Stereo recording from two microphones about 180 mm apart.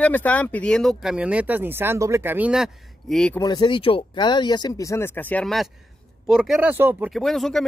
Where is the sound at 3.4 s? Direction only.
25° left (ahead or behind); by 7.6 s centre (ahead or behind).